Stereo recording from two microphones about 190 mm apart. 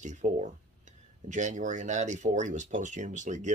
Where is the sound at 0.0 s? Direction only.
40° right (ahead or behind).